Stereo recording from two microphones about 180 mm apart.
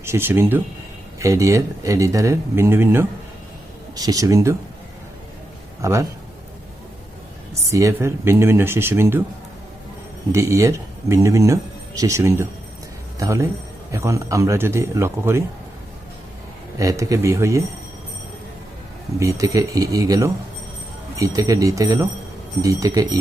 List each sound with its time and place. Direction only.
0.0 s speech: 15° right (ahead or behind)
5.8 s speech: 15° right (ahead or behind)
7.7 s speech: 15° right (ahead or behind)
10.3 s speech: 15° right (ahead or behind)
16.7 s speech: 20° right (ahead or behind)
19.2 s speech: 20° right (ahead or behind)